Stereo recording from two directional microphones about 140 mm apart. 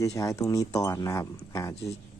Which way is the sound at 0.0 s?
25° left (ahead or behind).